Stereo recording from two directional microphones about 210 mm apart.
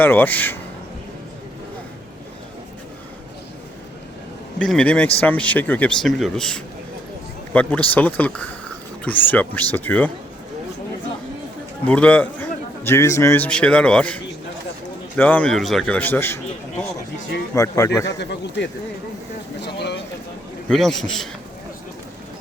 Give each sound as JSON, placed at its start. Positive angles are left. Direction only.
{"t": 0.0, "sound": "a man's voice", "side_deg": 10}
{"t": 4.5, "sound": "a man's voice", "side_deg": 5}
{"t": 11.9, "sound": "a man's voice", "side_deg": 5}
{"t": 17.5, "sound": "a man's voice", "side_deg": 15}
{"t": 18.2, "sound": "speech", "side_deg": 55}
{"t": 19.6, "sound": "a sound", "side_deg": 55}
{"t": 20.7, "sound": "speech", "side_deg": 0}